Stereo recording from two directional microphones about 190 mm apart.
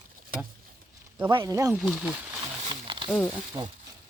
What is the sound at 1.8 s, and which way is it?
Speech, 5° right (ahead or behind).